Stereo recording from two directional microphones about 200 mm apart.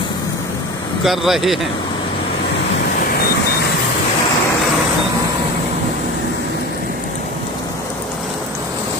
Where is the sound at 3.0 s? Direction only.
50° left (ahead or behind).